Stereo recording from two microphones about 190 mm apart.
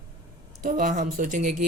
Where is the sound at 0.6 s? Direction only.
45° right (ahead or behind).